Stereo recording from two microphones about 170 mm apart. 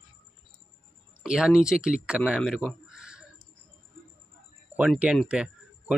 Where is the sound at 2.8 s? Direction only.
5° right (ahead or behind).